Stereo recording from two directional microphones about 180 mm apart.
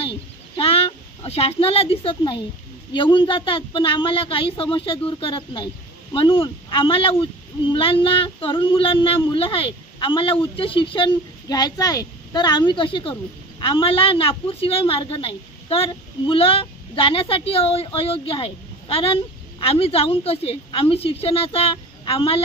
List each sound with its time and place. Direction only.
0.6 s a woman's voice: 30° left (ahead or behind)
7.7 s child singing: 30° left (ahead or behind)